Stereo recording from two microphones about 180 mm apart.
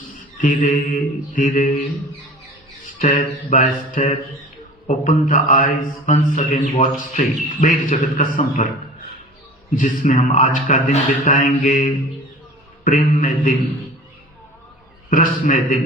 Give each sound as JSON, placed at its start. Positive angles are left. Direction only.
{"t": 0.4, "sound": "mantra", "side_deg": 45}
{"t": 3.0, "sound": "mantra", "side_deg": 45}
{"t": 9.7, "sound": "mantra", "side_deg": 45}
{"t": 15.1, "sound": "mantra", "side_deg": 45}